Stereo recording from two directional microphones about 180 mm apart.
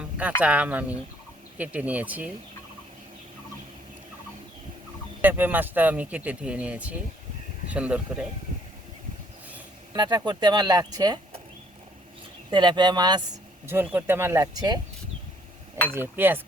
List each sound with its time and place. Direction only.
0.2 s speech: 10° right (ahead or behind)
5.2 s speech: 10° right (ahead or behind)
9.9 s speech: 20° right (ahead or behind)
12.5 s speech: 25° right (ahead or behind)
16.0 s speech: 10° right (ahead or behind)